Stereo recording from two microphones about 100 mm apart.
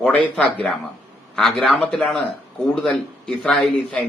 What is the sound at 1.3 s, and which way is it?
A man's voice, 5° left (ahead or behind).